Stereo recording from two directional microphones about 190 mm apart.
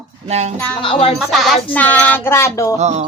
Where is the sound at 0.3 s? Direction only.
35° right (ahead or behind).